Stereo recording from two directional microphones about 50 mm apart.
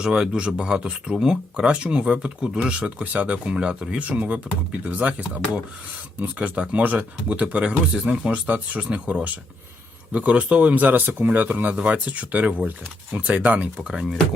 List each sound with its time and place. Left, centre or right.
0.0 s speech: centre
3.5 s speech: centre
4.0 s speech: right
6.6 s speech: right
13.2 s speech: right
13.7 s speech: centre